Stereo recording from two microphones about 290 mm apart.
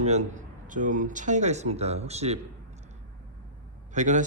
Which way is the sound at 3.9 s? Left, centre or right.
Right.